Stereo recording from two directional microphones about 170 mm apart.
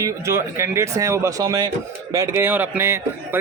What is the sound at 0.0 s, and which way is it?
A man's voice, 15° right (ahead or behind).